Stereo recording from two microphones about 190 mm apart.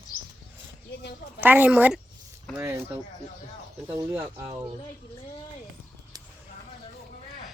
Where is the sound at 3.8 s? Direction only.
10° right (ahead or behind).